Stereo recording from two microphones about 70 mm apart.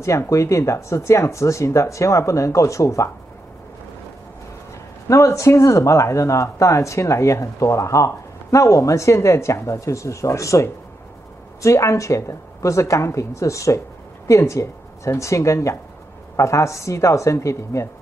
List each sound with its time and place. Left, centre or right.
0.3 s speech: left
5.0 s speech: left